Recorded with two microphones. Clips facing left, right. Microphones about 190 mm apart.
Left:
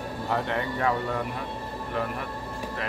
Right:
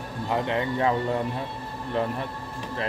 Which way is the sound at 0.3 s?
20° right (ahead or behind).